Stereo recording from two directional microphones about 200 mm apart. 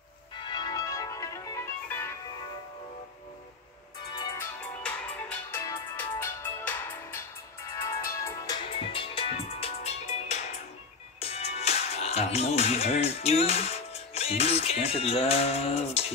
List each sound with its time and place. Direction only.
0.4 s music: 20° left (ahead or behind)
4.8 s music: 5° left (ahead or behind)
8.7 s music: 25° left (ahead or behind)
11.1 s speech: 30° left (ahead or behind)